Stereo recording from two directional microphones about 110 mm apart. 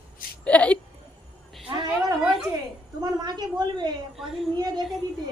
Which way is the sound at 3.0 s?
40° right (ahead or behind).